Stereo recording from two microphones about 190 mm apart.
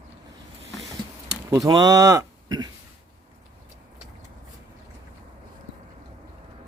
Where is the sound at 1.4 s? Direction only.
20° right (ahead or behind).